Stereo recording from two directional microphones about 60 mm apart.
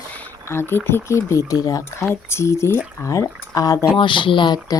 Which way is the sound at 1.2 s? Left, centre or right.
Left.